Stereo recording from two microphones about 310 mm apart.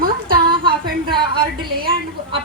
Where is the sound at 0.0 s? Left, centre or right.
Right.